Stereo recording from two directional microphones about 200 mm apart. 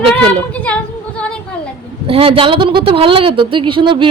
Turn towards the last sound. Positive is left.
turn(degrees=-25)  # may be behind; listen again after turning